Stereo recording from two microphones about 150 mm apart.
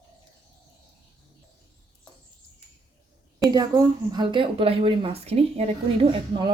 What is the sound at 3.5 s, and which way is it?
A woman's voice, 25° right (ahead or behind).